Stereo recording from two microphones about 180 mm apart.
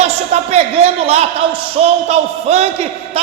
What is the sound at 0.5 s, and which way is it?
A man's voice, 35° right (ahead or behind).